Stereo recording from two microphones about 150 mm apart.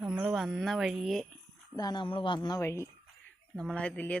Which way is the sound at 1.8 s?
30° left (ahead or behind).